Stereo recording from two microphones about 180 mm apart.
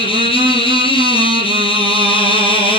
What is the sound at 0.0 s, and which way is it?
Music, 30° left (ahead or behind).